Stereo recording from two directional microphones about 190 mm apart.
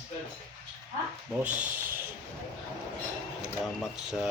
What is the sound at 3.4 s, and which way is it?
Speech, centre (ahead or behind).